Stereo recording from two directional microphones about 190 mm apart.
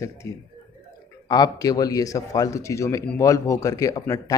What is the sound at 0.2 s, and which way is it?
A man's voice, 15° left (ahead or behind).